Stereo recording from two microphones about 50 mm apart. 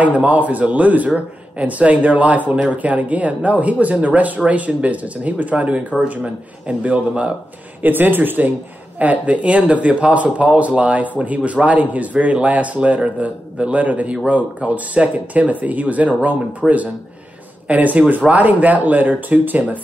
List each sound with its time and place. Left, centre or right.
0.0 s speech: right
7.8 s speech: right